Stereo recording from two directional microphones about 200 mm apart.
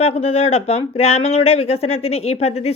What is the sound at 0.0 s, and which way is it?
Speech, 30° left (ahead or behind).